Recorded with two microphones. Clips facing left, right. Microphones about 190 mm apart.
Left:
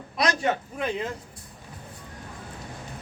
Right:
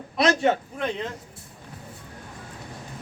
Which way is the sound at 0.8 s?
5° left (ahead or behind).